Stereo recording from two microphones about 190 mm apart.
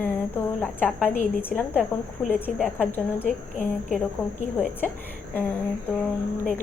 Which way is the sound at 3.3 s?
45° left (ahead or behind).